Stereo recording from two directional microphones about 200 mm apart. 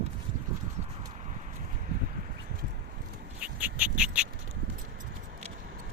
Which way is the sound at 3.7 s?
5° right (ahead or behind).